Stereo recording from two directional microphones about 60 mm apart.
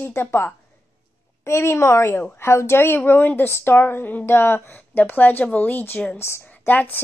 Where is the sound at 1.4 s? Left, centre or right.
Left.